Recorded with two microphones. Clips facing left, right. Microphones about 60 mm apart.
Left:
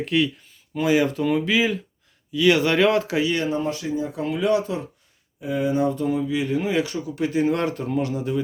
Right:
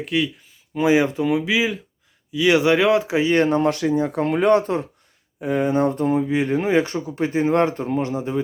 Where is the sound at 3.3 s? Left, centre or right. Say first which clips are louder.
Right 6 dB; right.